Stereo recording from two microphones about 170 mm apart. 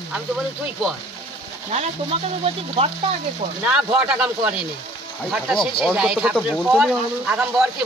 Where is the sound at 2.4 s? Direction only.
35° right (ahead or behind).